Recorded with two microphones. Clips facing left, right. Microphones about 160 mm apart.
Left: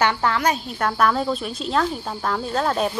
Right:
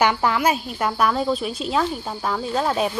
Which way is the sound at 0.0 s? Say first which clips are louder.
Right 1 dB; 15° right (ahead or behind).